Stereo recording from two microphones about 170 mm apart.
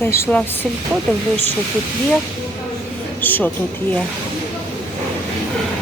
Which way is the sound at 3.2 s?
10° left (ahead or behind).